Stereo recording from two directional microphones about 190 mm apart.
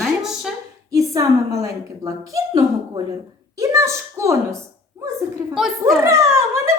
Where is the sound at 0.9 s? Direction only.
15° right (ahead or behind).